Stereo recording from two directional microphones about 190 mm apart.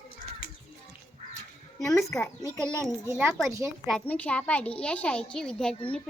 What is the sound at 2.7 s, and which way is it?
Speech, 15° right (ahead or behind).